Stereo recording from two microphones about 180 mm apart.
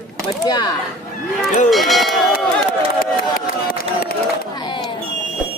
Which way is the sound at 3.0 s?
50° left (ahead or behind).